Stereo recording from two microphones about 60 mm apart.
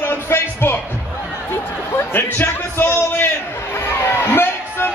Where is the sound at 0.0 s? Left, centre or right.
Left.